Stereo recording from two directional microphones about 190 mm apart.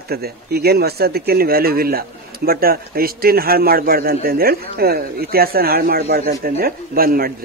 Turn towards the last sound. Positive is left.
turn(degrees=-50)  # may be behind; listen again after turning